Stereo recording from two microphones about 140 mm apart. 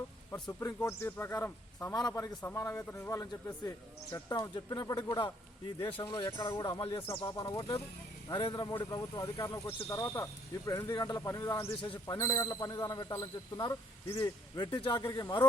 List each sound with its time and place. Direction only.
0.4 s speech: 25° left (ahead or behind)
11.8 s speech: 35° left (ahead or behind)
12.1 s speech: 25° left (ahead or behind)